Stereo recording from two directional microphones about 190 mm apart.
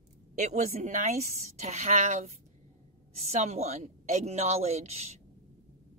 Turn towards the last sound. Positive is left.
turn(degrees=-35)  # may be behind; listen again after turning